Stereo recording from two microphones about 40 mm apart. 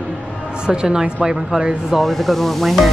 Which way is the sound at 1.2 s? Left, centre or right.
Centre.